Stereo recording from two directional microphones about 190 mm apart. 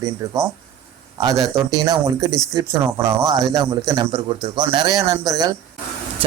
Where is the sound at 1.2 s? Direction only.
15° right (ahead or behind).